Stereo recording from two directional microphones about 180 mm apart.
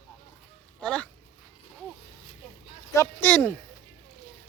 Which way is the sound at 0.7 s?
5° left (ahead or behind).